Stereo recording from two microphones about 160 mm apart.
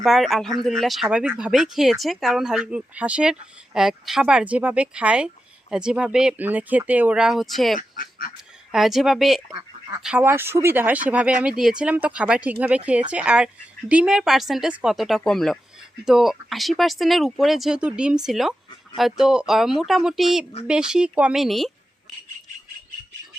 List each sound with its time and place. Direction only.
0.0 s speech: centre (ahead or behind)
7.8 s duck: 65° left (ahead or behind)
8.7 s speech: centre (ahead or behind)